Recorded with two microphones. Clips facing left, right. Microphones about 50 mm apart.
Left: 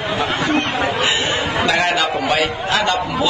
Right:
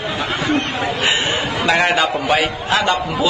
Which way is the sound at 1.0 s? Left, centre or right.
Right.